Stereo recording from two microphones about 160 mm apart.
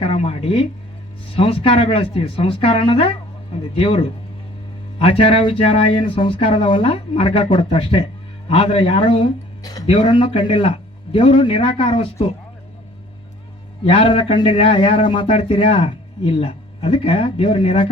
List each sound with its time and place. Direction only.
0.0 s a sound: 35° left (ahead or behind)
1.4 s speech: 35° left (ahead or behind)
13.8 s speech: 35° left (ahead or behind)